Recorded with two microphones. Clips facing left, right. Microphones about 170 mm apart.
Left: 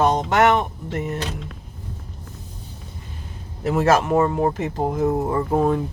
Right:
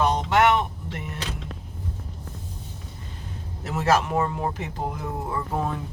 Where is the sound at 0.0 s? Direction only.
40° left (ahead or behind).